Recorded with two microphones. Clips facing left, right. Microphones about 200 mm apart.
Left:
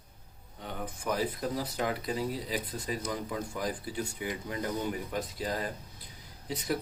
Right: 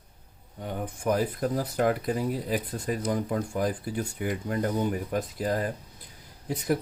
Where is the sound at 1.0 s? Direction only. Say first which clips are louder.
Right 5 dB; 55° right (ahead or behind).